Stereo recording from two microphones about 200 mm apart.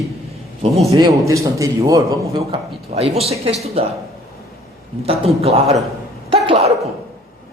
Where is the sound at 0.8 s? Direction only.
20° right (ahead or behind).